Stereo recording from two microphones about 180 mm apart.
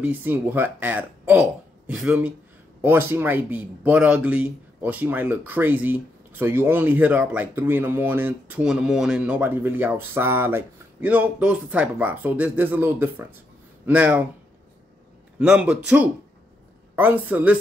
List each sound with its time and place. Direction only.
0.0 s speech: 10° right (ahead or behind)
15.3 s speech: 5° right (ahead or behind)